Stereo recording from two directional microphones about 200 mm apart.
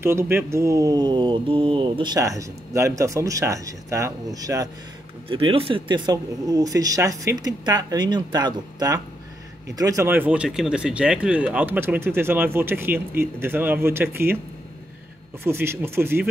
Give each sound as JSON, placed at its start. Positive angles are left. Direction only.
{"t": 0.0, "sound": "speech", "side_deg": -10}
{"t": 15.4, "sound": "speech", "side_deg": -10}